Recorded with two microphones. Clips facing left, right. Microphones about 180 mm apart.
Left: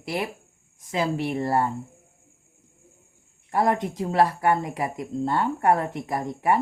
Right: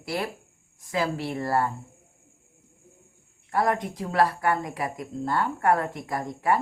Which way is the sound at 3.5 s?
25° left (ahead or behind).